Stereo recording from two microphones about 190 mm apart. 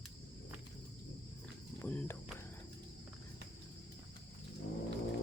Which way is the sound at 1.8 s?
10° left (ahead or behind).